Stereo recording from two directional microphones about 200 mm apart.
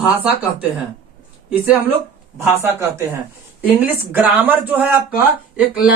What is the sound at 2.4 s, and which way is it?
Speech, 15° right (ahead or behind).